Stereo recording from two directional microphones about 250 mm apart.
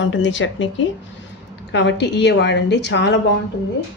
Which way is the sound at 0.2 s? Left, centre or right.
Left.